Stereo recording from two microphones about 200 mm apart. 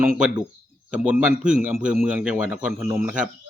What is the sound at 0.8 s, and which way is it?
A man's voice, 5° right (ahead or behind).